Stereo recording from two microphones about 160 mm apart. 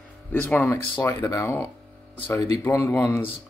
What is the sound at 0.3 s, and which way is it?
Speech, 10° left (ahead or behind).